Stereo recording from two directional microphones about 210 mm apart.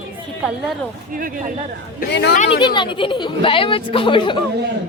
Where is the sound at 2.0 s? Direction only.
45° left (ahead or behind).